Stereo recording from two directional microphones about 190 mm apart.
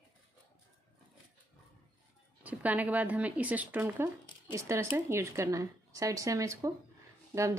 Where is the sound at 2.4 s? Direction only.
10° right (ahead or behind).